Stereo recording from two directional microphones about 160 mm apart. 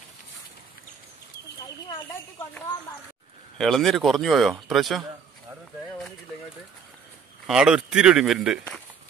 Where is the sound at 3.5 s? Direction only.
Centre (ahead or behind).